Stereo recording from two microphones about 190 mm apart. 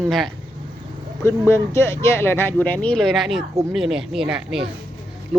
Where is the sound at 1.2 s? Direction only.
15° left (ahead or behind).